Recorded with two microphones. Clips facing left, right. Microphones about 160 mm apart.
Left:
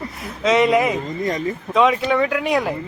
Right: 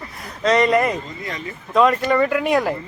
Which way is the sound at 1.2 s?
45° left (ahead or behind).